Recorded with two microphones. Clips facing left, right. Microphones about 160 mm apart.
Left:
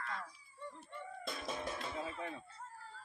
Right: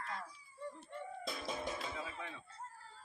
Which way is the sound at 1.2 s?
5° right (ahead or behind).